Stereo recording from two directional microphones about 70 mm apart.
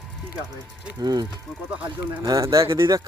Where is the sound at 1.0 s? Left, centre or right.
Right.